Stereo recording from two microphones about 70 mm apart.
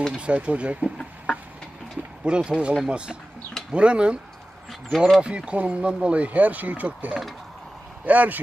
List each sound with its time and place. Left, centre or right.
0.2 s speech: centre
2.2 s speech: centre
4.7 s speech: centre
5.2 s speech: centre